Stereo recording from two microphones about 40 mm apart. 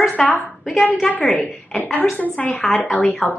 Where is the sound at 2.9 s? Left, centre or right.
Centre.